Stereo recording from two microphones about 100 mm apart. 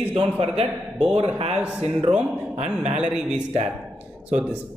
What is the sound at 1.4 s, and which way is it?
A man's voice, 80° right.